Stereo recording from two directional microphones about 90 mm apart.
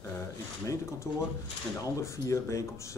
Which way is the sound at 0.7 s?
35° left (ahead or behind).